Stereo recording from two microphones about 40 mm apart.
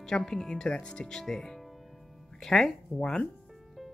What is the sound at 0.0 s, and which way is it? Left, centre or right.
Speech, centre.